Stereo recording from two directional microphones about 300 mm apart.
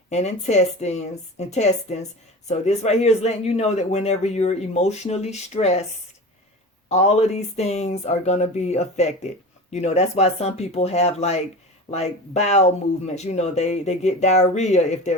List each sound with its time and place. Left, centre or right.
0.1 s speech: left
6.8 s speech: left